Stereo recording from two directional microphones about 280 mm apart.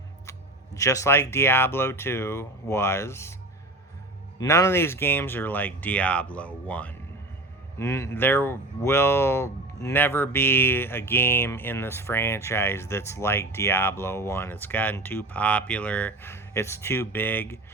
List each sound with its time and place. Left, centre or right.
0.3 s speech: centre
4.4 s speech: centre